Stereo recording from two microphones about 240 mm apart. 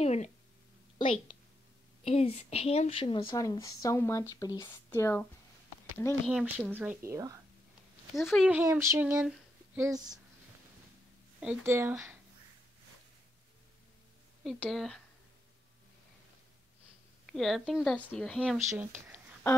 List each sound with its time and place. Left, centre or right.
0.0 s a sound: left
0.9 s a woman's voice: left
6.2 s speech: centre
8.2 s speech: centre
11.3 s speech: centre
14.4 s speech: centre
17.3 s a woman's voice: centre
19.0 s a sound: centre